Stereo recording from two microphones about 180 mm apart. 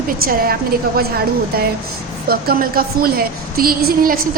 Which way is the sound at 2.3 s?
55° right (ahead or behind).